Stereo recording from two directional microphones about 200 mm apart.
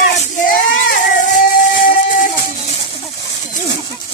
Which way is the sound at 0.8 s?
40° left (ahead or behind).